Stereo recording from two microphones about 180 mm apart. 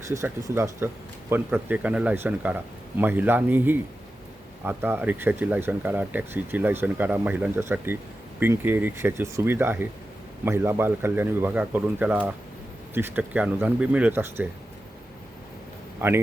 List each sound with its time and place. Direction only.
0.1 s speech: 15° right (ahead or behind)
16.0 s a man's voice: 10° right (ahead or behind)